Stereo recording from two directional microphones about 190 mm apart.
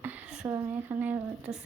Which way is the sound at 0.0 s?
10° right (ahead or behind).